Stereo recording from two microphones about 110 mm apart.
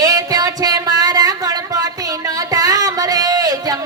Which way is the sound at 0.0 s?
35° right (ahead or behind).